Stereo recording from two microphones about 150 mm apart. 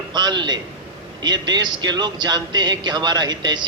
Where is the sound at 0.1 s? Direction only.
30° right (ahead or behind).